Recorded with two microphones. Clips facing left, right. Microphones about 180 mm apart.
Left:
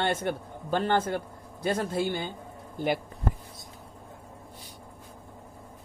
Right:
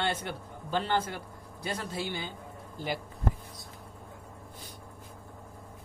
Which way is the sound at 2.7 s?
60° left (ahead or behind).